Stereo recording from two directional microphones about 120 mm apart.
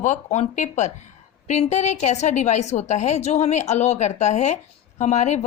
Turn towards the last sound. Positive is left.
turn(degrees=70)  # may be behind; listen again after turning